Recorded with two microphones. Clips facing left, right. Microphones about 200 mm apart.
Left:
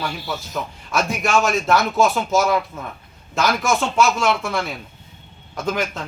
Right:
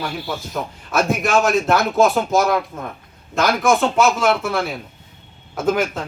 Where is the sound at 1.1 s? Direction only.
Centre (ahead or behind).